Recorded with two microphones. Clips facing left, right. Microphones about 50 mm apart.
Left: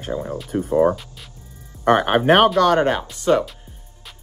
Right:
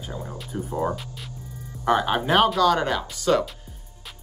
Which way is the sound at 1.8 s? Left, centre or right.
Left.